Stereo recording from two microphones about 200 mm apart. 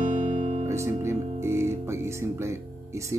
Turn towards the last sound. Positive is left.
turn(degrees=-15)  # may be behind; listen again after turning